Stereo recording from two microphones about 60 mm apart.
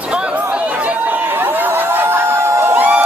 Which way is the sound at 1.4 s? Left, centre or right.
Right.